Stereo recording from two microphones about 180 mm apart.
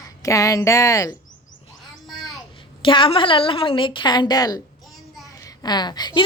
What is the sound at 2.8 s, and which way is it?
A woman's voice, 30° left (ahead or behind).